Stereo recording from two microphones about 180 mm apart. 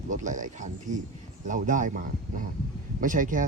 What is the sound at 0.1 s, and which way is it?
Speech, 45° right (ahead or behind).